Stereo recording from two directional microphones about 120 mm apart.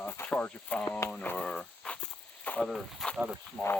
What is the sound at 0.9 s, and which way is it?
Speech, 10° left (ahead or behind).